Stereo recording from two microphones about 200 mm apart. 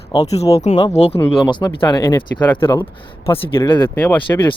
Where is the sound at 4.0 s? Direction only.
10° left (ahead or behind).